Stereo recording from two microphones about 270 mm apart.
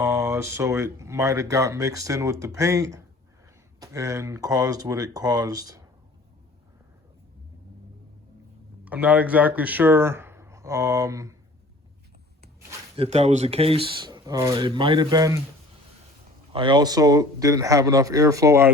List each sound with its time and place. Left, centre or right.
0.0 s speech: centre
8.8 s speech: centre
13.0 s speech: right
16.5 s speech: centre